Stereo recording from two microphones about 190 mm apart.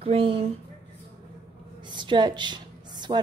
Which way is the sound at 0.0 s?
30° right (ahead or behind).